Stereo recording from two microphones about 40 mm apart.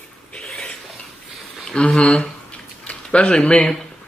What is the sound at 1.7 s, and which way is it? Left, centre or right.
Speech, left.